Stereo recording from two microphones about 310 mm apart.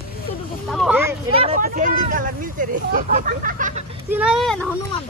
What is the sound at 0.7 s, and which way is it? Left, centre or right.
Speech, centre.